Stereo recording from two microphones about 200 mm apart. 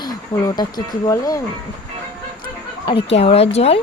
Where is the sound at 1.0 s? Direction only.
15° left (ahead or behind).